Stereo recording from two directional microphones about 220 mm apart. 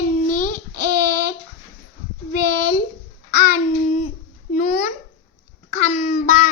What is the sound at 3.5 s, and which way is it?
A child's voice, 35° left (ahead or behind).